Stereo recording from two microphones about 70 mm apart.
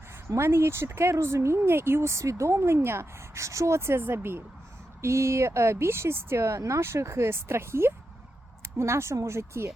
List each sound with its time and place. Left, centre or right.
0.3 s speech: right